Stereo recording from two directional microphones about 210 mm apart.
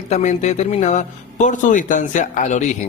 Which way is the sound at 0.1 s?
35° left (ahead or behind).